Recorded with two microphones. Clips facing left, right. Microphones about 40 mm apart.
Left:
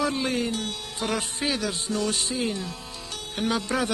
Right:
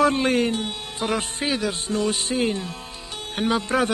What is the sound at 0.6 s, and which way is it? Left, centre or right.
Music, centre.